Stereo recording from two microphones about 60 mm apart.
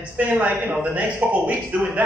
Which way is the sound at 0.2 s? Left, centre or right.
Right.